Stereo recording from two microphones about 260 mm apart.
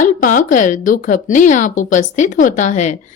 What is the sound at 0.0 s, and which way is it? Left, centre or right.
Speech, left.